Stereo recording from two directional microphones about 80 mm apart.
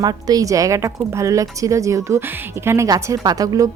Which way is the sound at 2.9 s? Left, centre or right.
Right.